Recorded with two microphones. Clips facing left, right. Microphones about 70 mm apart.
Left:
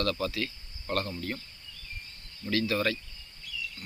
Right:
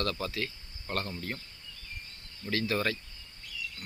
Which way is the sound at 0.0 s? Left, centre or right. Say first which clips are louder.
Left 3 dB; right.